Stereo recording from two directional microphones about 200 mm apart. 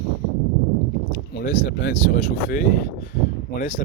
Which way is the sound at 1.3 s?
50° left (ahead or behind).